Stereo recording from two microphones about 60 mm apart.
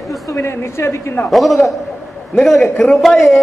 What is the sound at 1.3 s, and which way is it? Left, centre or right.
A man's voice, centre.